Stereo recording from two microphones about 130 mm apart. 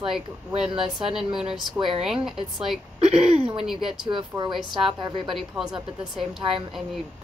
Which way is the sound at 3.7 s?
5° right (ahead or behind).